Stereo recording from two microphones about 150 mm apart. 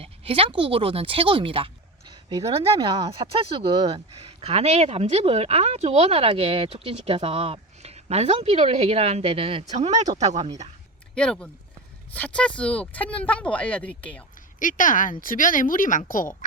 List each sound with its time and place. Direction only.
0.0 s speech: 40° right (ahead or behind)
2.5 s speech: 40° right (ahead or behind)
11.1 s speech: 5° left (ahead or behind)
14.6 s a woman's voice: 60° left (ahead or behind)